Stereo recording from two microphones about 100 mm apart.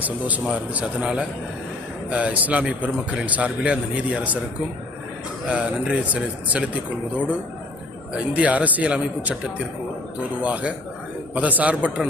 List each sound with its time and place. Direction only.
0.0 s a man's voice: 15° right (ahead or behind)
5.5 s a man's voice: 10° right (ahead or behind)
8.3 s a man's voice: 15° right (ahead or behind)
10.4 s a man's voice: 15° right (ahead or behind)